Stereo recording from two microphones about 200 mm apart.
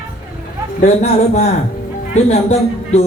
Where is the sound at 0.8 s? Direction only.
35° left (ahead or behind).